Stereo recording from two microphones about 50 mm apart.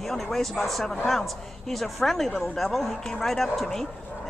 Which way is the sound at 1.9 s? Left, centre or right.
Centre.